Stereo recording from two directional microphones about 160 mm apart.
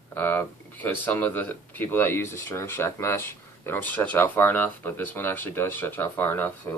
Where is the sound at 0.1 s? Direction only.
15° left (ahead or behind).